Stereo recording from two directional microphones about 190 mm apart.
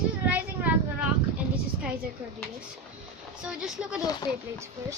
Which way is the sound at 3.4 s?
5° right (ahead or behind).